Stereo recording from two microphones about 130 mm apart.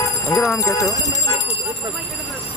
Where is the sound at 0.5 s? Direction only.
25° left (ahead or behind).